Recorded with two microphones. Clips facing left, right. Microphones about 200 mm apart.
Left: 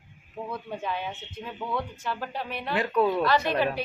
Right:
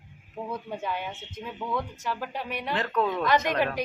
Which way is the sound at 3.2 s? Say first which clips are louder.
Even; 15° right (ahead or behind).